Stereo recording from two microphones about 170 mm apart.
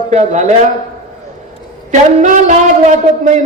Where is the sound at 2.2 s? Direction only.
45° right (ahead or behind).